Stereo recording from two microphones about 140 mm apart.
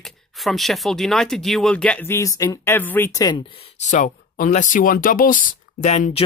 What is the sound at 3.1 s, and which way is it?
Speech, 30° left (ahead or behind).